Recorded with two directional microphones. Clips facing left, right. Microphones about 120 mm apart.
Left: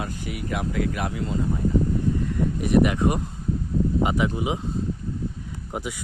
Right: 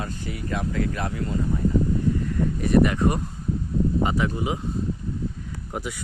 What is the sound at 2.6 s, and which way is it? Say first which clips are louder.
Speech: even; 15° left (ahead or behind).